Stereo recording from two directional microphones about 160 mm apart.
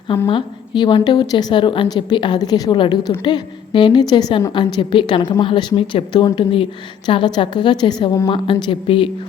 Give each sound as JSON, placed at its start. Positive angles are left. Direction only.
{"t": 0.3, "sound": "a woman's voice", "side_deg": 30}